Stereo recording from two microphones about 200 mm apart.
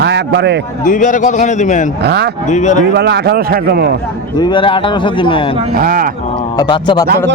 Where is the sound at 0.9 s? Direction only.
40° left (ahead or behind).